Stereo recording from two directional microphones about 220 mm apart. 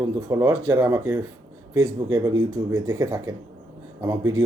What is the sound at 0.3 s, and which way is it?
Speech, 15° right (ahead or behind).